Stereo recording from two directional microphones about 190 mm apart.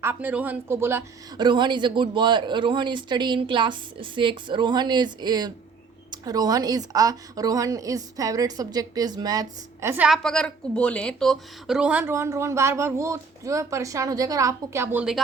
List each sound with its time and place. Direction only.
0.0 s a woman's voice: 10° right (ahead or behind)
1.5 s speech: 25° right (ahead or behind)
10.1 s a woman's voice: 5° left (ahead or behind)